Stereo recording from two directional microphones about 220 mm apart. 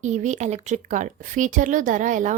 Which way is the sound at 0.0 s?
35° right (ahead or behind).